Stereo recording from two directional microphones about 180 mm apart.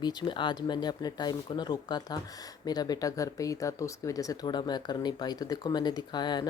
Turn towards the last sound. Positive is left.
turn(degrees=25)  # may be behind; listen again after turning